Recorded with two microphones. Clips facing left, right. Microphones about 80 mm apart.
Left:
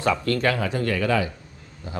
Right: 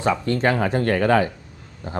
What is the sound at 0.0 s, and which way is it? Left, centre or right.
Speech, right.